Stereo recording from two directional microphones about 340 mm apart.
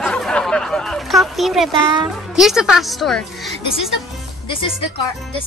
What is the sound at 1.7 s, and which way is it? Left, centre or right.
Speech, centre.